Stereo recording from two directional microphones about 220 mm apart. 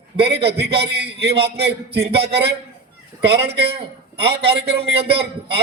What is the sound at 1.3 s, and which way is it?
Speech, 25° right (ahead or behind).